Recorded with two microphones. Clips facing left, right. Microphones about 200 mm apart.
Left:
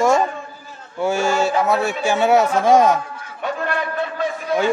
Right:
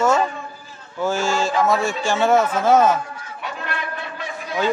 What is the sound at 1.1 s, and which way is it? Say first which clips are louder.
Speech: left 4 dB; 65° left (ahead or behind).